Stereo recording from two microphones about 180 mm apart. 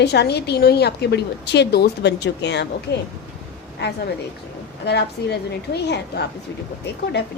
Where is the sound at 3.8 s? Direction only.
65° left (ahead or behind).